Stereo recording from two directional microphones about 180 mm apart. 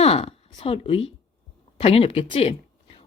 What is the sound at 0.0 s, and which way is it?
A woman's voice, 35° left (ahead or behind).